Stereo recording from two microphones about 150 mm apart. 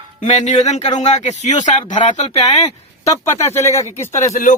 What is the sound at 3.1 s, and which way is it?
Speech, 20° left (ahead or behind).